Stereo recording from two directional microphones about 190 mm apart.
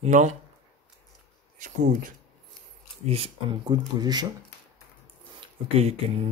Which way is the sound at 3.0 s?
30° right (ahead or behind).